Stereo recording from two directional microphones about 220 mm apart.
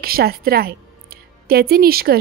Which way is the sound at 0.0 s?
45° right (ahead or behind).